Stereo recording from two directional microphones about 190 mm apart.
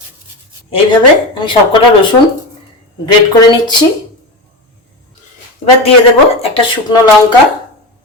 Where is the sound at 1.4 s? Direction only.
25° left (ahead or behind).